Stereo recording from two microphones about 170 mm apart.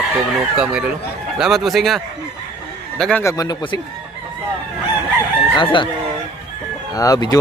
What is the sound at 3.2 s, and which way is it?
Speech, 20° left (ahead or behind).